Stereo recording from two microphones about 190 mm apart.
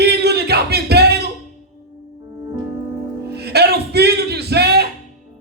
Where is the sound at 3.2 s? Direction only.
60° right (ahead or behind).